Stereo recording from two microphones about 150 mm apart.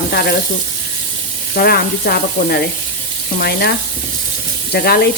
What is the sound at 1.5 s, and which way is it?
Speech, 90° left.